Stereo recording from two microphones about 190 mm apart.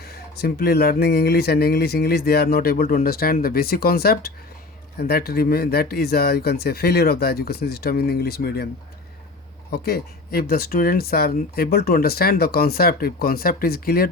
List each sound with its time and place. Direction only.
0.0 s speech: 55° left (ahead or behind)
9.7 s speech: 55° left (ahead or behind)